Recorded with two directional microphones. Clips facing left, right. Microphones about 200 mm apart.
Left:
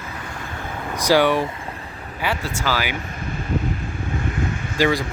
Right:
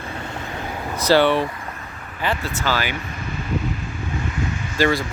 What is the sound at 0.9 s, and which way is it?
Speech, 15° left (ahead or behind).